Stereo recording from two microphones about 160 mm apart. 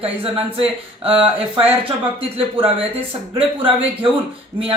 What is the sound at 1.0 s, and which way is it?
Speech, 35° right (ahead or behind).